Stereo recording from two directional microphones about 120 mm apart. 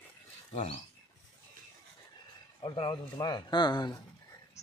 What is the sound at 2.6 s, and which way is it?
A man's voice, 45° left (ahead or behind).